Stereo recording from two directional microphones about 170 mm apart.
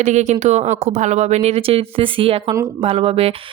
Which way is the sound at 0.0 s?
45° right (ahead or behind).